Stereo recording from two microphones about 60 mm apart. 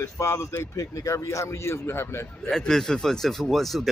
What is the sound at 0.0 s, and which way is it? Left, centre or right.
Speech, left.